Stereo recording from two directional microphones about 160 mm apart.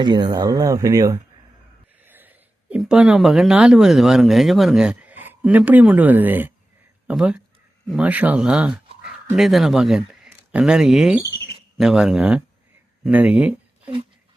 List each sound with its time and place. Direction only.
0.0 s speech: 25° right (ahead or behind); by 13.9 s 10° right (ahead or behind)